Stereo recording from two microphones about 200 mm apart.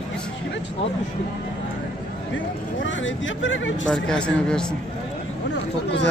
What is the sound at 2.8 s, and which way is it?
Speech, 70° left (ahead or behind).